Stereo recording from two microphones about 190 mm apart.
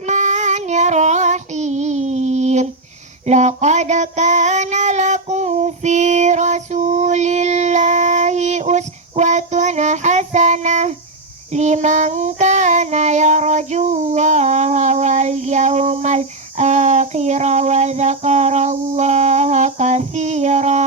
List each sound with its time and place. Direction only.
0.0 s child singing: 40° right (ahead or behind)